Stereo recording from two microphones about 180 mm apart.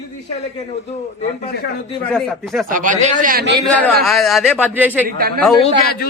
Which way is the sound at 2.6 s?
45° right (ahead or behind).